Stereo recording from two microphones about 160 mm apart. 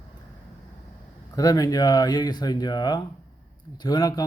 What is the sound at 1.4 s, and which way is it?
A man's voice, 25° left (ahead or behind).